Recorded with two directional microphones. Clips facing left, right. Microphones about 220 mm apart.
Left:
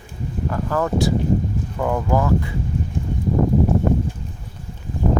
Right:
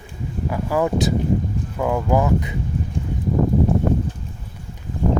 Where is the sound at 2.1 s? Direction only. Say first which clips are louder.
Right 1 dB; 15° right (ahead or behind).